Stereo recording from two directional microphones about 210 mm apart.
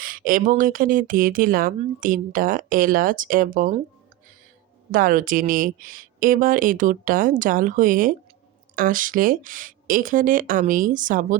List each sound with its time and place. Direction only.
0.0 s speech: 40° right (ahead or behind)
4.9 s speech: 40° right (ahead or behind)